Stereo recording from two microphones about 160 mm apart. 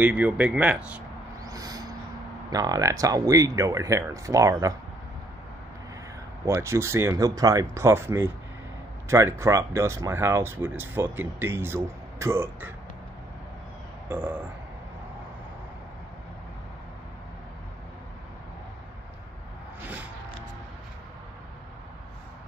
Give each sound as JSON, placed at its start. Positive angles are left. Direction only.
{"t": 0.0, "sound": "speech", "side_deg": -10}
{"t": 1.4, "sound": "a sound", "side_deg": -25}
{"t": 2.5, "sound": "speech", "side_deg": -25}
{"t": 6.4, "sound": "speech", "side_deg": -15}
{"t": 14.0, "sound": "burping", "side_deg": -10}